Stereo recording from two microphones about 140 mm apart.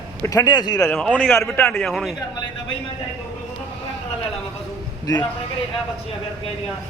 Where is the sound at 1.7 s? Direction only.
Centre (ahead or behind).